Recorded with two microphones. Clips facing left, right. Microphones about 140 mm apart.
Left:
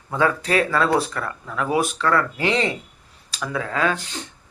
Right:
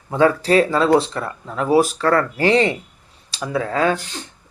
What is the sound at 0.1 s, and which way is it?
Speech, 30° right (ahead or behind).